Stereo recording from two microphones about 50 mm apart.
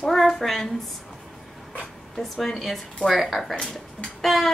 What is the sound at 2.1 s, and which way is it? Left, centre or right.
A woman's voice, centre.